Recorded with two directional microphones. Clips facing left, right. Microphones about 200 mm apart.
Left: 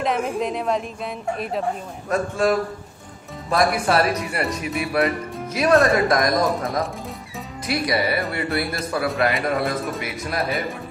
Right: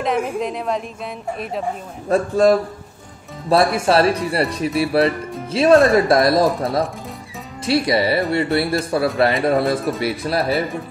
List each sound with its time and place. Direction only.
0.0 s a woman's voice: centre (ahead or behind)
2.0 s speech: 35° right (ahead or behind)
5.8 s a woman's voice: centre (ahead or behind)
6.0 s speech: 30° right (ahead or behind)
7.6 s speech: 25° right (ahead or behind)